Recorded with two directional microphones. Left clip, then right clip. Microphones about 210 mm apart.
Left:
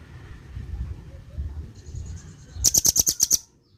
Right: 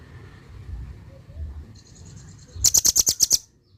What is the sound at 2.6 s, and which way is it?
Bird, 20° right (ahead or behind).